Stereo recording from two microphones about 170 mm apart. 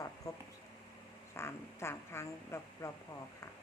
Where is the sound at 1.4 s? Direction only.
15° left (ahead or behind).